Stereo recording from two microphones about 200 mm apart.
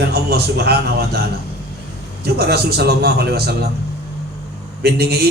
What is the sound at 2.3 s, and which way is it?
A man's voice, 50° right (ahead or behind).